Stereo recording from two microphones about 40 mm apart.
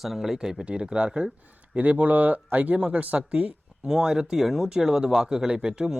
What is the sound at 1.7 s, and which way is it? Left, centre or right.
Speech, right.